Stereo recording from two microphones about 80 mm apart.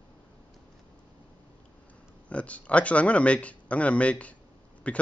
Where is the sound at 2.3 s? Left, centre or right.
Centre.